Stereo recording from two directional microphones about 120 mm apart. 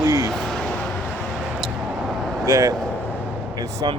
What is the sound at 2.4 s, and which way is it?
Speech, 25° right (ahead or behind).